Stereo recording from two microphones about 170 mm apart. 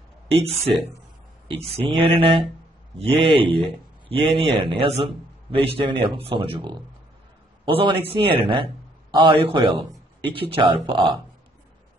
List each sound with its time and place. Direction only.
0.3 s a man's voice: 35° right (ahead or behind)